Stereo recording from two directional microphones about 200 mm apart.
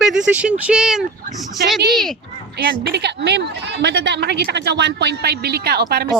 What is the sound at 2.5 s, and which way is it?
A woman's voice, 55° right (ahead or behind).